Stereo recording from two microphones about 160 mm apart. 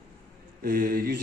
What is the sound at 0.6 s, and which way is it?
Speech, 65° right (ahead or behind).